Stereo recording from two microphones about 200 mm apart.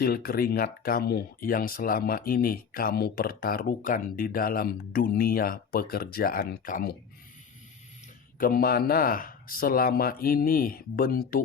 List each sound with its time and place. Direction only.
0.0 s speech: 50° left (ahead or behind)
8.4 s speech: 45° left (ahead or behind)